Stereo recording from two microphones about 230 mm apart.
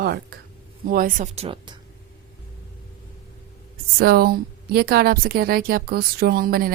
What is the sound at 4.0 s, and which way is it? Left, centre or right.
A woman's voice, right.